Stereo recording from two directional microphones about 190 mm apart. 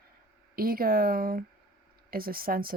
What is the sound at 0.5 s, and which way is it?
Speech, 50° right (ahead or behind).